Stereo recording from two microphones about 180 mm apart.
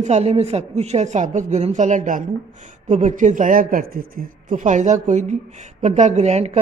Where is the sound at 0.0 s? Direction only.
35° right (ahead or behind).